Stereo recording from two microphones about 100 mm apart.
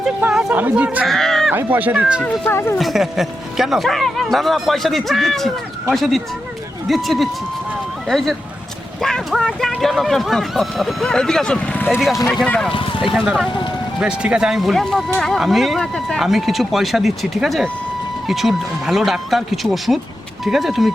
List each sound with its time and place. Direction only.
0.2 s speech: 10° right (ahead or behind)
1.0 s a sound: 5° left (ahead or behind)
1.5 s speech: 20° right (ahead or behind)
2.5 s speech: 25° left (ahead or behind)
2.7 s speech: centre (ahead or behind)
12.7 s speech: 60° left (ahead or behind)
14.0 s speech: 10° right (ahead or behind)